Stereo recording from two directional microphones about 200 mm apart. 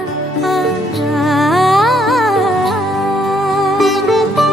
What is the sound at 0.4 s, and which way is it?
Music, centre (ahead or behind).